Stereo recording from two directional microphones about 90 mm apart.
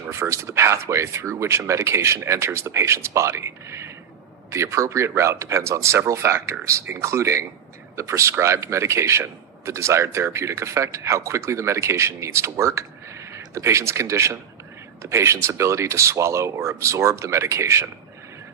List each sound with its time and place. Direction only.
0.1 s a man's voice: 30° right (ahead or behind)